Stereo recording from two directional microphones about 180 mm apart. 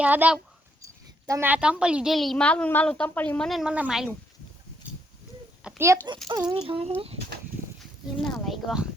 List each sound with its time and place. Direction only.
0.0 s a woman's voice: 10° right (ahead or behind)
5.6 s speech: 10° right (ahead or behind)
6.5 s speech: 30° right (ahead or behind)
8.2 s a woman's voice: centre (ahead or behind)